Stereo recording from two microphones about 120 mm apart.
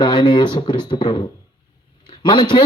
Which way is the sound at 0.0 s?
40° left (ahead or behind).